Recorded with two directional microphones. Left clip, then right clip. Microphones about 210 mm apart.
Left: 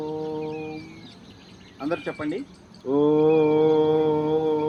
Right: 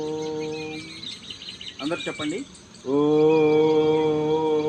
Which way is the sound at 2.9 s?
30° right (ahead or behind).